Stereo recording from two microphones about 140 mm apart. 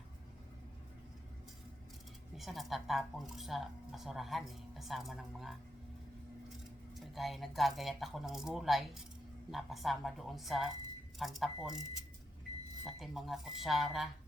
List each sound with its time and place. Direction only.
2.3 s speech: centre (ahead or behind)
6.9 s speech: centre (ahead or behind)
12.8 s speech: centre (ahead or behind)